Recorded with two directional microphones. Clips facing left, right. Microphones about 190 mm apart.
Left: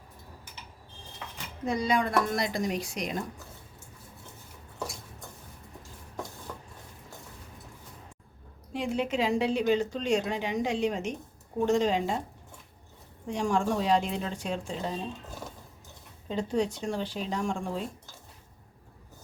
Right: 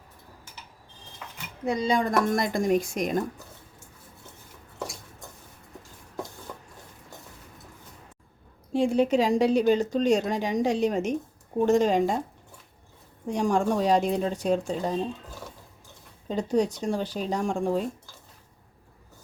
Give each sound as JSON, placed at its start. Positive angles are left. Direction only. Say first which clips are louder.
{"t": 1.8, "sound": "speech", "louder": "right 2 dB", "side_deg": -30}
{"t": 2.0, "sound": "a woman's voice", "louder": "right 3 dB", "side_deg": -50}
{"t": 8.7, "sound": "a woman's voice", "louder": "right 8 dB", "side_deg": -35}
{"t": 13.2, "sound": "speech", "louder": "right 3 dB", "side_deg": -40}
{"t": 16.3, "sound": "speech", "louder": "right 4 dB", "side_deg": -40}